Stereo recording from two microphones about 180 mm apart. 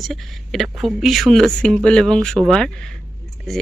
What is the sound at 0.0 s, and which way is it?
Speech, centre (ahead or behind).